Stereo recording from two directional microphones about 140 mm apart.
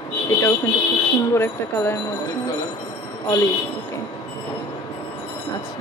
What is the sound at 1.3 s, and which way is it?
Speech, 20° left (ahead or behind).